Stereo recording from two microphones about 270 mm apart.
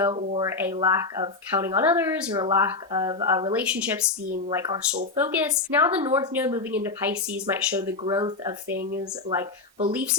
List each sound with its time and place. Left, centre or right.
0.0 s speech: centre